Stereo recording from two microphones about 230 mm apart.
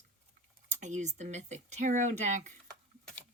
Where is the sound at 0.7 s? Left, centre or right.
Right.